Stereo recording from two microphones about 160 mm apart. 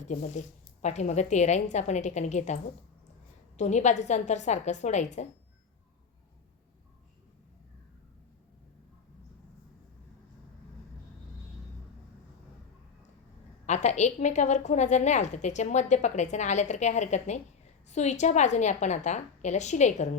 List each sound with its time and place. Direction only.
0.0 s a woman's voice: 50° left (ahead or behind)
3.6 s a woman's voice: 45° left (ahead or behind)
13.7 s a woman's voice: 45° left (ahead or behind)